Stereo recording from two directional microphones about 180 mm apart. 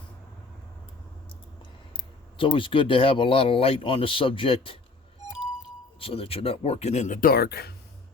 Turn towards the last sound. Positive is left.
turn(degrees=60)  # may be behind; listen again after turning